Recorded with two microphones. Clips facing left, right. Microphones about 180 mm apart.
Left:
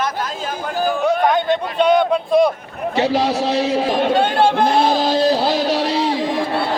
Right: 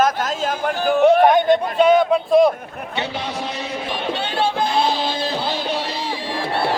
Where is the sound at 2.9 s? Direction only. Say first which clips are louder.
Left 10 dB; 35° left (ahead or behind).